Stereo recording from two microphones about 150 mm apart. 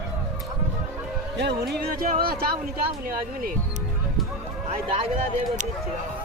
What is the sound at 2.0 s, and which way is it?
Speech, 80° right.